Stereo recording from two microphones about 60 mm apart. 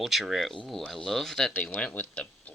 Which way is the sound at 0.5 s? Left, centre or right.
Centre.